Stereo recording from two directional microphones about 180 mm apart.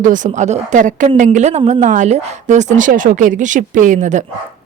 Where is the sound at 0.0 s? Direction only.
45° right (ahead or behind).